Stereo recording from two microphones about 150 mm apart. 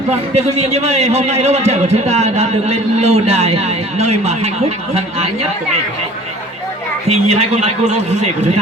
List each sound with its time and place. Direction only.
0.1 s a man's voice: 45° right (ahead or behind)
7.1 s a man's voice: 45° right (ahead or behind)